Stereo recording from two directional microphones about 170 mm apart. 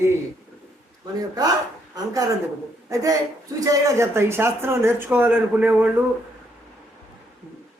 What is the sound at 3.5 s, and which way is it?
Speech, 20° right (ahead or behind).